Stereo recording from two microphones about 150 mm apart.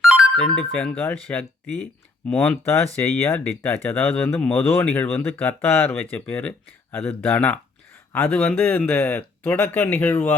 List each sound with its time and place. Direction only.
0.0 s music: 5° right (ahead or behind)
0.4 s speech: 5° left (ahead or behind)